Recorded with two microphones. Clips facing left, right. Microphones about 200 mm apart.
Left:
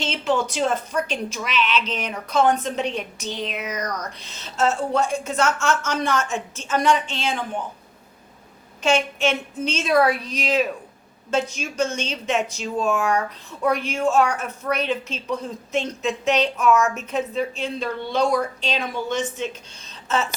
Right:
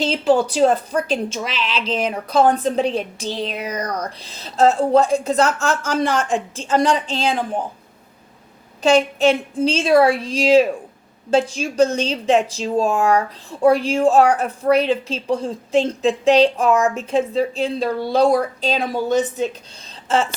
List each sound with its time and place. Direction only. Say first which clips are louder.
0.0 s speech: right 6 dB; 35° right (ahead or behind)
8.8 s a woman's voice: right 6 dB; 35° right (ahead or behind)